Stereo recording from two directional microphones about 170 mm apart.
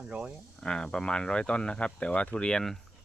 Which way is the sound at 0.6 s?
5° left (ahead or behind).